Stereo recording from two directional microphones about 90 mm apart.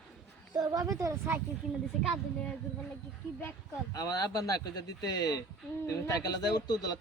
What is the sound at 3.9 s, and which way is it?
A man's voice, 45° left (ahead or behind).